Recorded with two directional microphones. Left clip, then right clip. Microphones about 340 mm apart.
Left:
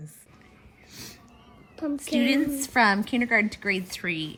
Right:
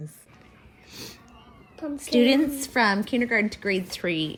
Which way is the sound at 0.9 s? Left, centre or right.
Centre.